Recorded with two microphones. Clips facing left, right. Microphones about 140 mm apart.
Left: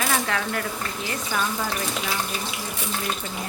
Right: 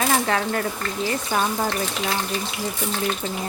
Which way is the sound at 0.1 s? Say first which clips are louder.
Right 4 dB; 35° right (ahead or behind).